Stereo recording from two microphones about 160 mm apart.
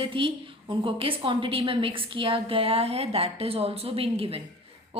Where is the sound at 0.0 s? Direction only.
35° right (ahead or behind).